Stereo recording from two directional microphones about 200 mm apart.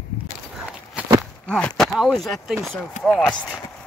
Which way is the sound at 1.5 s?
Centre (ahead or behind).